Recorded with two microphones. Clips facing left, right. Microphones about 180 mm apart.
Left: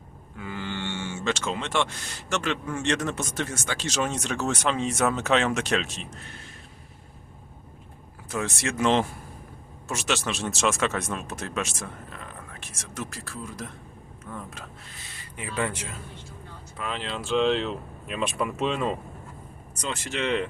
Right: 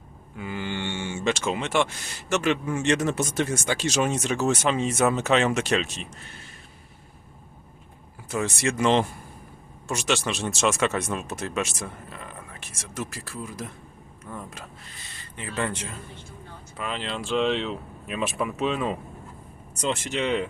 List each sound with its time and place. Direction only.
0.3 s speech: 15° right (ahead or behind)
8.3 s speech: centre (ahead or behind)
19.7 s speech: 25° right (ahead or behind)